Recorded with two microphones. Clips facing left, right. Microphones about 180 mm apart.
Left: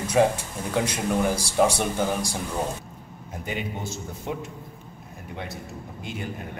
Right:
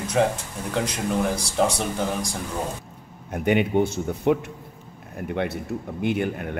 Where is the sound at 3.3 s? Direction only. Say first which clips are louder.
Right 12 dB; 65° right (ahead or behind).